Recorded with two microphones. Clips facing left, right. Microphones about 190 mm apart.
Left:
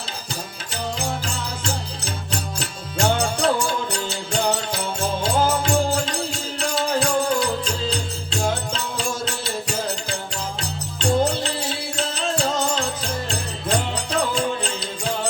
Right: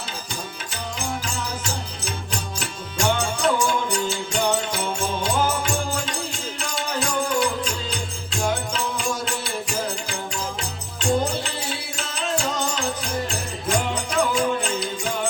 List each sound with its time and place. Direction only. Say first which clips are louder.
3.2 s music: left 1 dB; 35° left (ahead or behind)